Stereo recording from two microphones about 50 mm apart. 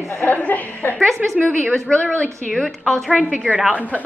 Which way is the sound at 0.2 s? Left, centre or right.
Left.